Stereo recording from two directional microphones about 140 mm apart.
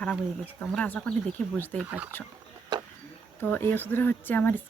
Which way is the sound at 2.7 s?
30° right (ahead or behind).